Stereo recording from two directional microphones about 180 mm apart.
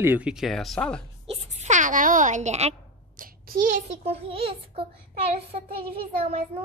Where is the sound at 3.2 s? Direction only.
45° right (ahead or behind).